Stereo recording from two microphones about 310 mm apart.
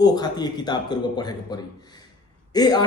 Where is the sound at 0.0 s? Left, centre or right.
Centre.